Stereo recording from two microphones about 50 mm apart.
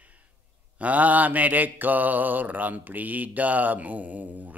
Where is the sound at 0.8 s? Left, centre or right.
Right.